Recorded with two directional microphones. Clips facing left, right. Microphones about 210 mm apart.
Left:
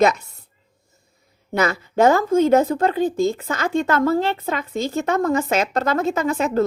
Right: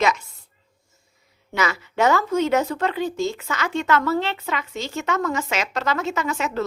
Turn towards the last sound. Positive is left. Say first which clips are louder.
# left 6 dB
turn(degrees=50)  # may be behind; listen again after turning